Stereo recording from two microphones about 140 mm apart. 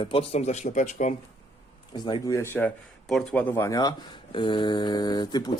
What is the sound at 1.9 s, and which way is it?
Speech, 30° left (ahead or behind).